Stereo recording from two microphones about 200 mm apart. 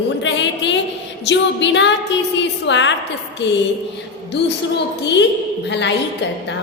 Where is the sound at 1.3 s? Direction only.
65° left (ahead or behind).